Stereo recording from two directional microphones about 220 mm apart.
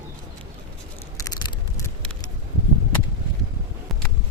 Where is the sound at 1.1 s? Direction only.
15° left (ahead or behind).